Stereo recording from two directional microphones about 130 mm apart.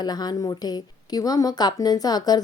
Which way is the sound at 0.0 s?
30° left (ahead or behind).